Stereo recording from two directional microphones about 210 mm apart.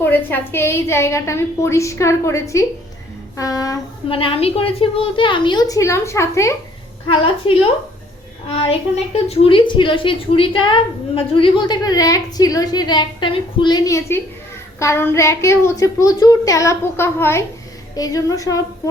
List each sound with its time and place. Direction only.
0.0 s a woman's voice: 10° left (ahead or behind)
7.1 s a woman's voice: 25° left (ahead or behind)